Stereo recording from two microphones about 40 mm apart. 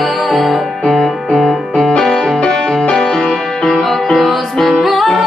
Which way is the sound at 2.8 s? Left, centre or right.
Left.